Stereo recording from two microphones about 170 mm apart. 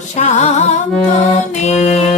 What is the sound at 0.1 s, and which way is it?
Music, 45° left (ahead or behind).